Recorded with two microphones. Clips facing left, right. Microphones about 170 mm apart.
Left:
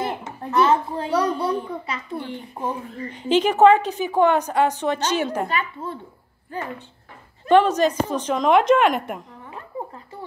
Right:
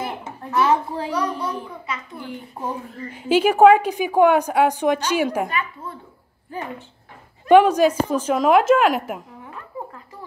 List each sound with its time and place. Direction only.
0.0 s a sound: centre (ahead or behind)
1.1 s a child's voice: 35° left (ahead or behind)
2.6 s a woman's voice: 5° right (ahead or behind)
5.5 s a child's voice: 30° left (ahead or behind)
7.4 s a woman's voice: 10° right (ahead or behind)